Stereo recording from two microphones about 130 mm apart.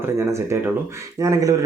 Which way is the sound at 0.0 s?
20° right (ahead or behind).